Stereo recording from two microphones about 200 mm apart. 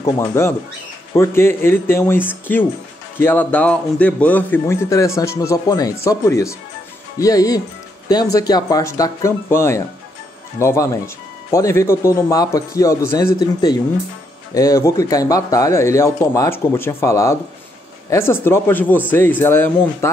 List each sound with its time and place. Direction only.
0.0 s speech: 15° left (ahead or behind)